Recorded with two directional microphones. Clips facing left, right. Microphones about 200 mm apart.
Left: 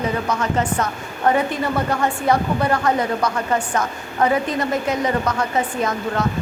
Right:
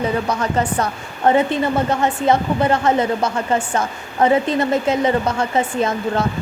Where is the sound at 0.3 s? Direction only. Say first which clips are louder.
Right 1 dB; 35° right (ahead or behind).